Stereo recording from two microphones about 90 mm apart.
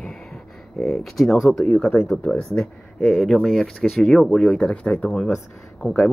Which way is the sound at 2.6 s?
Centre (ahead or behind).